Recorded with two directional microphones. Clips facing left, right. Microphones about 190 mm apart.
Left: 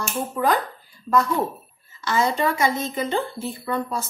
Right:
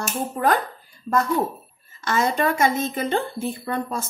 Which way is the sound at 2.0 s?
50° right (ahead or behind).